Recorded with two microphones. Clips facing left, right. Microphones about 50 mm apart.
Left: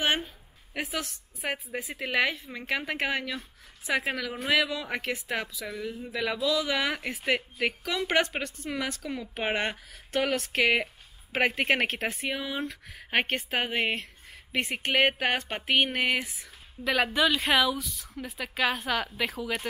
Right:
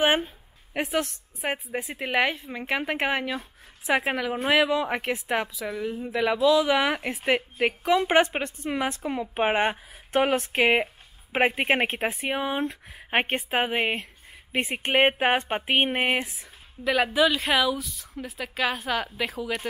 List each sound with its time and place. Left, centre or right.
0.0 s a woman's voice: centre
0.8 s a woman's voice: right
1.4 s a woman's voice: centre
16.8 s speech: centre